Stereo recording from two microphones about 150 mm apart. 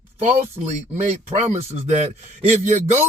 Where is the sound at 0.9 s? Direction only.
45° right (ahead or behind).